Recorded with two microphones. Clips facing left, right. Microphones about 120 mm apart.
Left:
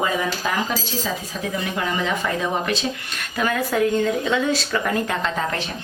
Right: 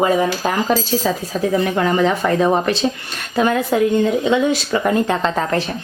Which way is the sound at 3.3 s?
25° right (ahead or behind).